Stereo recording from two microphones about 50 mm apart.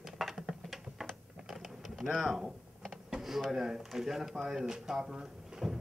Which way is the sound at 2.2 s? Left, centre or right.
Centre.